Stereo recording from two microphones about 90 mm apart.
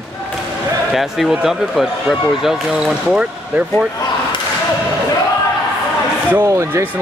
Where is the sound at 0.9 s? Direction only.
Centre (ahead or behind).